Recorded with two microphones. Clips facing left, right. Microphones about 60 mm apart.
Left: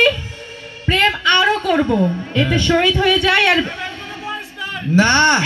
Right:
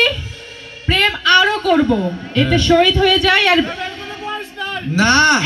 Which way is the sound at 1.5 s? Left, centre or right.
Left.